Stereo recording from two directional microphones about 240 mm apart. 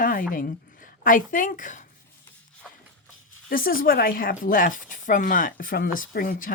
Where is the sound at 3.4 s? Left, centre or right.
Left.